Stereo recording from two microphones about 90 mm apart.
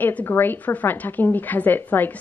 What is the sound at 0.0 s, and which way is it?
A woman's voice, 20° left (ahead or behind).